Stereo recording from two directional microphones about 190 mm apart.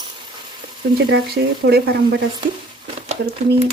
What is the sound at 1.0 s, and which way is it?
Speech, 55° right (ahead or behind).